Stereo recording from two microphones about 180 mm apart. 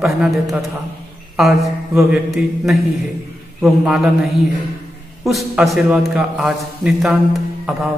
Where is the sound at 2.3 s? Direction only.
Centre (ahead or behind).